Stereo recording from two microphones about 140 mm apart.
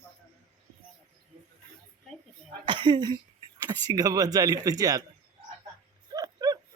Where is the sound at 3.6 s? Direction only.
25° right (ahead or behind).